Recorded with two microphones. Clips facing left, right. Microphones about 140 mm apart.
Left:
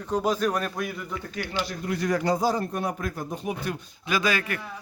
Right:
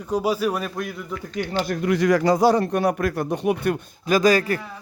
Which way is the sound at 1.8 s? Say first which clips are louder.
Right 8 dB; 90° right.